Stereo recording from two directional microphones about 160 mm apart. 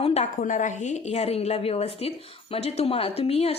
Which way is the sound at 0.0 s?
40° left (ahead or behind).